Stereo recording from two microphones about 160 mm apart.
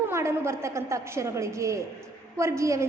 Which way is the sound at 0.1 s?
15° right (ahead or behind).